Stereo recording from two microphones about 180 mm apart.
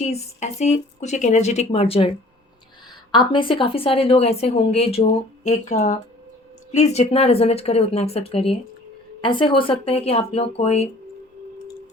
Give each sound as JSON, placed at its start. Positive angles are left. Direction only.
{"t": 0.0, "sound": "a woman's voice", "side_deg": 40}
{"t": 3.1, "sound": "a woman's voice", "side_deg": 25}